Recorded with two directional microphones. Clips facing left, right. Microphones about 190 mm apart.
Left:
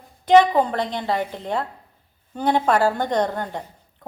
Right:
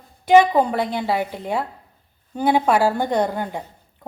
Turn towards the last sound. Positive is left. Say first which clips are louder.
# right 1 dB
turn(degrees=-10)  # may be behind; listen again after turning